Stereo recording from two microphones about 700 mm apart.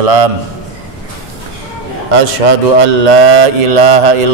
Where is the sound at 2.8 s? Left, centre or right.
Right.